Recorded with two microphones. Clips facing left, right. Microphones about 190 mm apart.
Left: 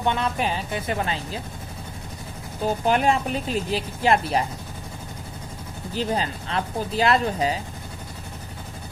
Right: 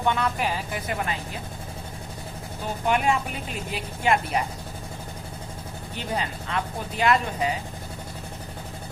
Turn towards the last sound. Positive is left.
turn(degrees=35)  # may be behind; listen again after turning